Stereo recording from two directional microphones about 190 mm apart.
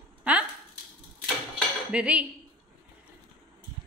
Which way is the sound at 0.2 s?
5° right (ahead or behind).